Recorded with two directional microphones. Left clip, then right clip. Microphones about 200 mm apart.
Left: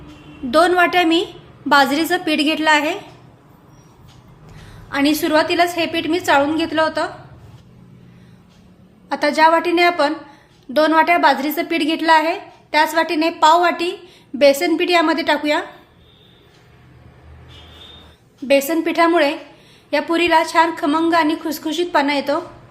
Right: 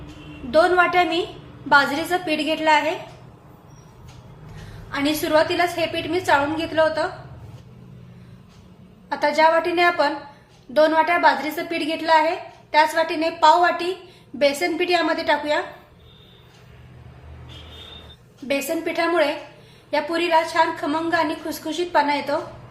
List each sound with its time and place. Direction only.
0.5 s a woman's voice: 55° left (ahead or behind)
4.9 s a woman's voice: 55° left (ahead or behind)
9.0 s a woman's voice: 50° left (ahead or behind)
18.4 s a woman's voice: 55° left (ahead or behind)